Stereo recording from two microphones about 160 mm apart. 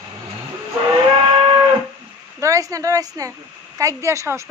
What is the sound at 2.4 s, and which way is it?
A woman's voice, 20° right (ahead or behind).